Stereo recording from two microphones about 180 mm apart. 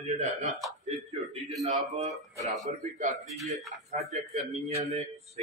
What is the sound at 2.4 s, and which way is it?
Speech, 40° right (ahead or behind).